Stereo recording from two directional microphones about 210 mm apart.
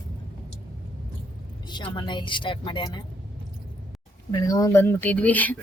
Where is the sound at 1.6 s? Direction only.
20° left (ahead or behind).